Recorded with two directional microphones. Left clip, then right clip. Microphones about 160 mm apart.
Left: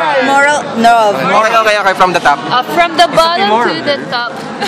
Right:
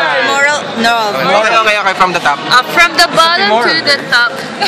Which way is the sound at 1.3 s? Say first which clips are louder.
Even; 25° left (ahead or behind).